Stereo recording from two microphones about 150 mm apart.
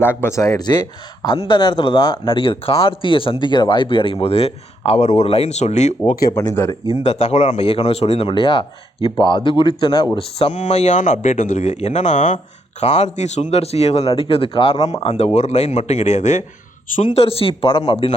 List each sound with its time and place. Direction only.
0.0 s speech: 15° left (ahead or behind); by 5.9 s 50° left (ahead or behind)
6.2 s speech: 20° left (ahead or behind)
7.0 s speech: 45° left (ahead or behind)
10.2 s speech: 40° left (ahead or behind)